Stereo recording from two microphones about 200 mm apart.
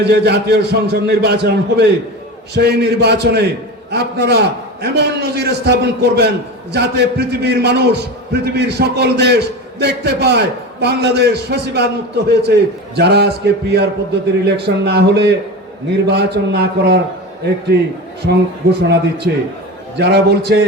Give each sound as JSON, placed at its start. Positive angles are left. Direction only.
{"t": 0.0, "sound": "a man's voice", "side_deg": -55}